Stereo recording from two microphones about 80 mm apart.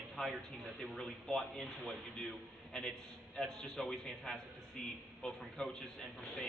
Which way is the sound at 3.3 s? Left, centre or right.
Centre.